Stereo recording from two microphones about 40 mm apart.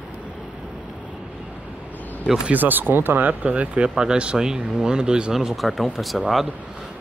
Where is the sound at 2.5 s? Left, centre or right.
Right.